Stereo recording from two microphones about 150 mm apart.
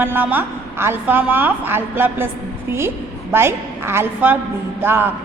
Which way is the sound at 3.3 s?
15° right (ahead or behind).